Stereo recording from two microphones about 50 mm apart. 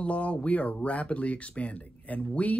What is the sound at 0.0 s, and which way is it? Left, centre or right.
Speech, left.